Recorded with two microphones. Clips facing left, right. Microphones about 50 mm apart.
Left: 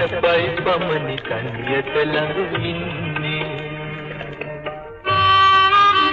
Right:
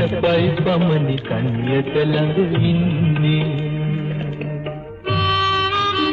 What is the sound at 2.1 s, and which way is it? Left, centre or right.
Music, left.